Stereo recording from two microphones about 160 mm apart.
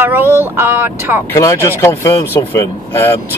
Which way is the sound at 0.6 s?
15° right (ahead or behind).